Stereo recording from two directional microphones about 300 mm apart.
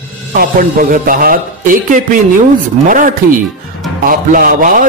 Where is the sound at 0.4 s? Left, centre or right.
Right.